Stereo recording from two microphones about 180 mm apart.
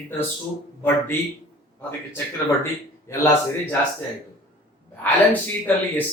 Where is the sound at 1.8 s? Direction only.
15° left (ahead or behind).